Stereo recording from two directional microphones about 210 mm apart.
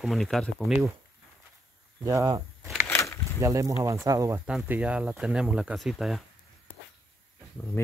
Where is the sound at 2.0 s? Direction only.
15° right (ahead or behind).